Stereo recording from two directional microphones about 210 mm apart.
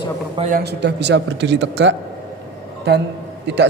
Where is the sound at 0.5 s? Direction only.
50° right (ahead or behind).